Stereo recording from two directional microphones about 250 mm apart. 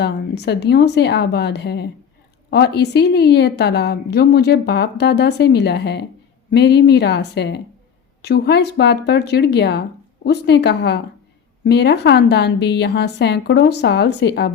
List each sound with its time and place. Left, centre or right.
0.0 s a woman's voice: left